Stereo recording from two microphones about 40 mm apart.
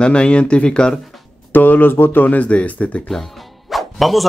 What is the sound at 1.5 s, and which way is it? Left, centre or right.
Speech, left.